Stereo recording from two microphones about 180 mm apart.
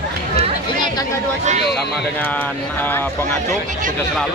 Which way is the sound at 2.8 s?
10° left (ahead or behind).